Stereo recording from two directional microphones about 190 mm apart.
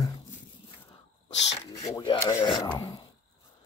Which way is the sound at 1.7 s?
15° left (ahead or behind).